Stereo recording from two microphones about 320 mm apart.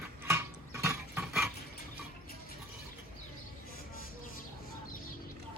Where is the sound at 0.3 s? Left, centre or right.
Centre.